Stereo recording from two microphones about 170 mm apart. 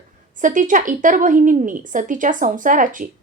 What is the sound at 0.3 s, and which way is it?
A woman's voice, 50° right (ahead or behind).